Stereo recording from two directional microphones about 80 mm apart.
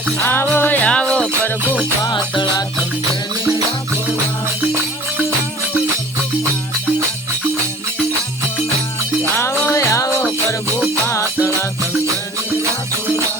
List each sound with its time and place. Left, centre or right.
0.3 s music: left
2.0 s music: left
9.3 s music: left